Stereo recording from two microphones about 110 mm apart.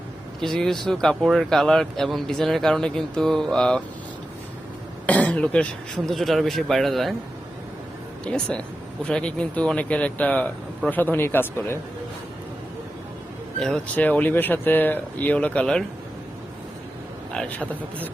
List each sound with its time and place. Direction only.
0.3 s speech: 5° left (ahead or behind)
5.0 s cough: 15° left (ahead or behind)
6.1 s speech: centre (ahead or behind)
8.2 s speech: 10° left (ahead or behind)
13.6 s speech: 5° left (ahead or behind)
17.3 s speech: 10° left (ahead or behind)